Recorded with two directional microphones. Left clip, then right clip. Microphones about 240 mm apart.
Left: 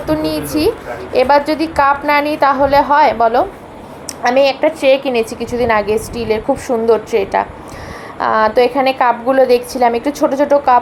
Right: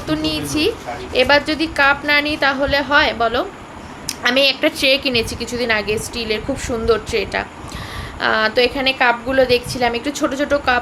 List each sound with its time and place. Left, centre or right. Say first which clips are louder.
0.1 s a woman's voice: left 4 dB; centre
4.4 s a woman's voice: left 4 dB; right
5.5 s a woman's voice: left 7 dB; centre